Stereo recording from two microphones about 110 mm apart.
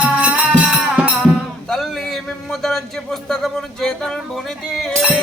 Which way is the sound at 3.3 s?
5° left (ahead or behind).